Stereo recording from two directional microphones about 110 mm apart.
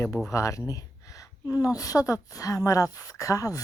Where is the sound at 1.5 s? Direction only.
30° left (ahead or behind).